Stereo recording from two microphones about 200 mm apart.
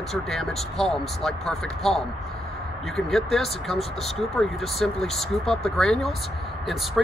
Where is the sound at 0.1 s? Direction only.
Centre (ahead or behind).